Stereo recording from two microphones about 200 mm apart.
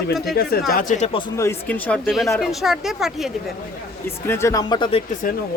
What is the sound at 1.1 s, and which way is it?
Speech, 15° left (ahead or behind).